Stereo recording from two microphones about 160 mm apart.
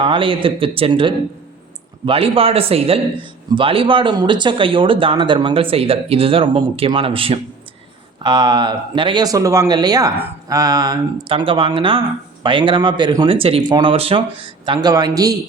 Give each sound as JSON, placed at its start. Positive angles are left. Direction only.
{"t": 0.0, "sound": "a man's voice", "side_deg": -35}